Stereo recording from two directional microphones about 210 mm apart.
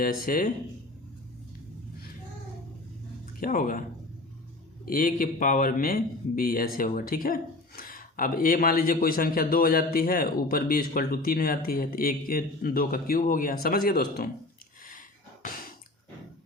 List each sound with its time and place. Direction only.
0.0 s speech: 40° left (ahead or behind)
3.4 s speech: 40° left (ahead or behind)
4.9 s a man's voice: 40° left (ahead or behind)